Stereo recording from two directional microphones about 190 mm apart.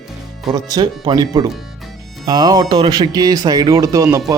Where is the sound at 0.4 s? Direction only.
20° right (ahead or behind).